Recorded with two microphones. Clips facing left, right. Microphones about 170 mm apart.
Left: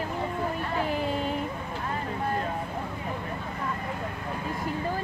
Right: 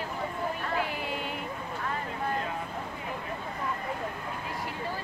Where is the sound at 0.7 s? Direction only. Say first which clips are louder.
Left 4 dB; 40° left (ahead or behind).